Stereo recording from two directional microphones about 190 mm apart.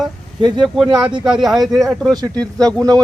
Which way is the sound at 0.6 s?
Centre (ahead or behind).